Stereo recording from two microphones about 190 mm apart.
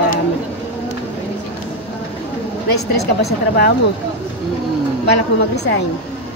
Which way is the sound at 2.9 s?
60° left (ahead or behind).